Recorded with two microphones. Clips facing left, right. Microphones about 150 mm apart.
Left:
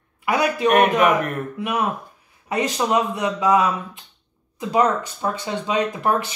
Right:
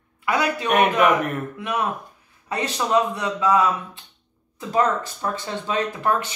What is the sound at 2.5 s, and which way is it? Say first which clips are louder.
Speech: left 1 dB; 15° left (ahead or behind).